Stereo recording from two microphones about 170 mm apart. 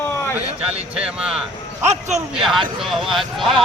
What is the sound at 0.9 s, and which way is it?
Speech, 5° right (ahead or behind).